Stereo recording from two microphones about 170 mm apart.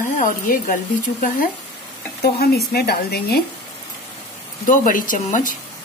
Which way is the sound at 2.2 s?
65° left (ahead or behind).